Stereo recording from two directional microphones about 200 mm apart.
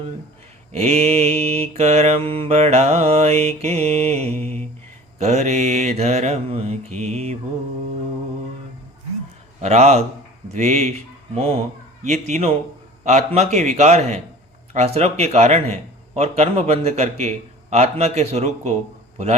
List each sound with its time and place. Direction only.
0.7 s a man's voice: 35° right (ahead or behind)
9.6 s a man's voice: 35° right (ahead or behind)
12.0 s a man's voice: 35° right (ahead or behind)